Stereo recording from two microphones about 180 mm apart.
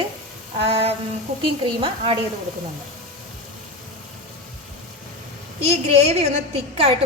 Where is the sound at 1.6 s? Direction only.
30° right (ahead or behind).